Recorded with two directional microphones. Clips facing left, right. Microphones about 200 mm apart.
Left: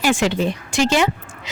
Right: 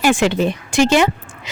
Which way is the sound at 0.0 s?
55° right (ahead or behind).